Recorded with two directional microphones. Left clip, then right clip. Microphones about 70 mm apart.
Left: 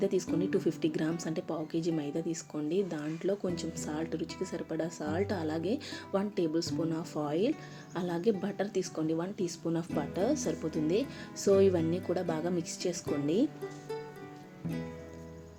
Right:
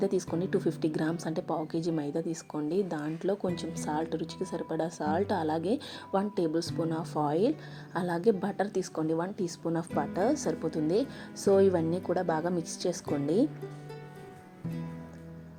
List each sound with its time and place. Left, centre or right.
0.0 s speech: right
10.2 s speech: right